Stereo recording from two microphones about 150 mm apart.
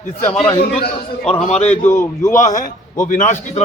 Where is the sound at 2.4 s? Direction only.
60° left (ahead or behind).